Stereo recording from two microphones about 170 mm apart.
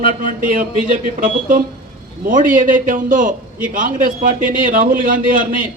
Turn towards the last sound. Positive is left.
turn(degrees=-55)  # may be behind; listen again after turning